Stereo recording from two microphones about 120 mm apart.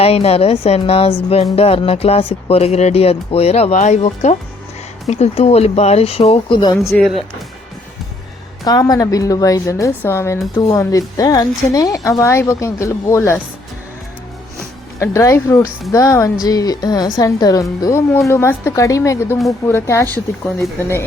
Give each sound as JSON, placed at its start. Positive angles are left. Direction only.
{"t": 0.0, "sound": "speech", "side_deg": 55}
{"t": 6.9, "sound": "speech", "side_deg": 5}
{"t": 8.6, "sound": "a woman's voice", "side_deg": 30}
{"t": 14.9, "sound": "a woman's voice", "side_deg": 25}